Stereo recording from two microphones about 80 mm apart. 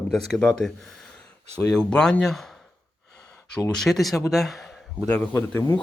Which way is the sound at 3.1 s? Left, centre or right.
Centre.